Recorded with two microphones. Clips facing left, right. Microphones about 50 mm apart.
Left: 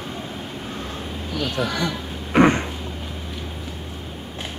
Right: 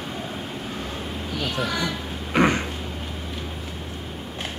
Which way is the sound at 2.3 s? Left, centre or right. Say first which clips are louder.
Left 4 dB; left.